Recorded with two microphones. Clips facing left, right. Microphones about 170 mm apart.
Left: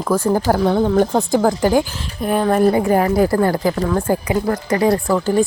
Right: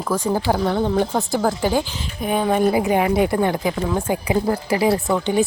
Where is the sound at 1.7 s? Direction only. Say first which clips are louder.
Left 5 dB; 5° left (ahead or behind).